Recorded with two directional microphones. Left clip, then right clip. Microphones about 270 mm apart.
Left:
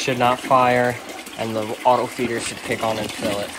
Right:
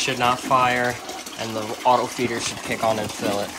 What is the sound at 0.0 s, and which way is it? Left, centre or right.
Speech, centre.